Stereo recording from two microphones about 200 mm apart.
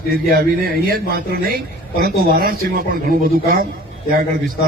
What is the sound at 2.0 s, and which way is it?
Speech, 50° right (ahead or behind).